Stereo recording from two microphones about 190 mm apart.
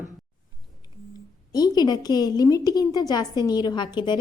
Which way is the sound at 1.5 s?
20° left (ahead or behind).